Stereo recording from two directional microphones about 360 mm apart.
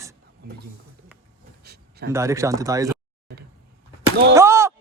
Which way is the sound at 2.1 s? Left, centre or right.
Centre.